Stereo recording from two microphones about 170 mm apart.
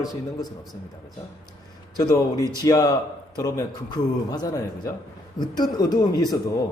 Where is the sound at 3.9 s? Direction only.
25° left (ahead or behind).